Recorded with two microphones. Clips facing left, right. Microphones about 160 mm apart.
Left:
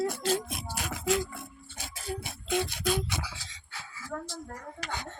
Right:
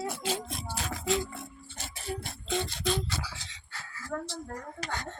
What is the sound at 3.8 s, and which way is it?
Dog, 10° left (ahead or behind).